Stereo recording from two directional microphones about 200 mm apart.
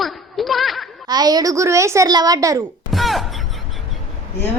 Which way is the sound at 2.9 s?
Centre (ahead or behind).